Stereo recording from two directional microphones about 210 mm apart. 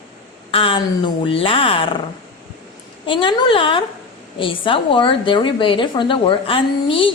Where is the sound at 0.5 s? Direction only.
25° left (ahead or behind).